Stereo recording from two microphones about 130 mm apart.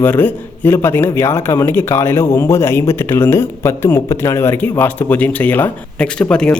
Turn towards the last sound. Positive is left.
turn(degrees=5)  # may be behind; listen again after turning